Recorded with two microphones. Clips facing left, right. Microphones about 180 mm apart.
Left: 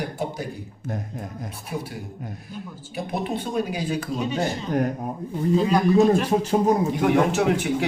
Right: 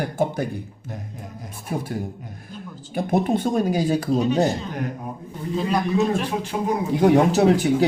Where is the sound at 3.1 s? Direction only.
45° right (ahead or behind).